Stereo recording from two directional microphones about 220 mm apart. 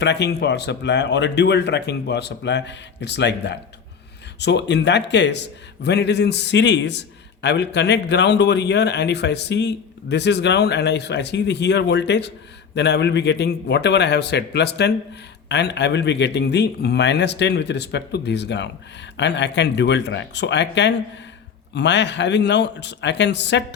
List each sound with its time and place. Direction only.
0.0 s speech: 50° left (ahead or behind)